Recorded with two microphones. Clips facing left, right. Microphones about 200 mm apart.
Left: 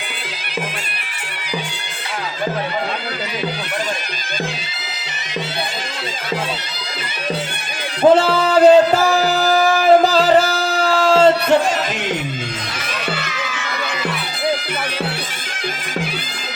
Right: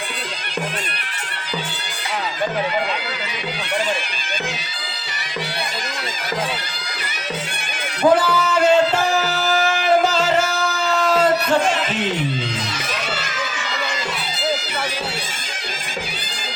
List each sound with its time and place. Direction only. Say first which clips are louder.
8.1 s music: left 4 dB; 25° left (ahead or behind)